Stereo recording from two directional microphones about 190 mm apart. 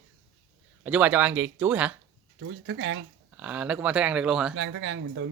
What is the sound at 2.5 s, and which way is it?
Speech, 85° right.